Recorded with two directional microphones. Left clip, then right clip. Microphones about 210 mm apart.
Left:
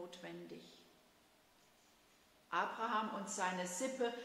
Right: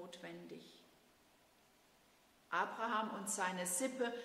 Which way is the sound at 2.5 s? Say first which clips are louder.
Even; 25° right (ahead or behind).